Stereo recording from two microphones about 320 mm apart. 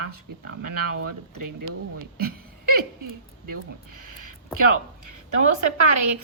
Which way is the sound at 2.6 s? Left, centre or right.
Right.